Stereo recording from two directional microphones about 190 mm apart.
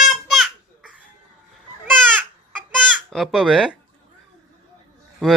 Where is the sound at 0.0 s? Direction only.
Centre (ahead or behind).